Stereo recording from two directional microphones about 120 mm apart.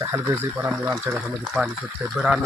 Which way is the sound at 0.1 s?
20° right (ahead or behind).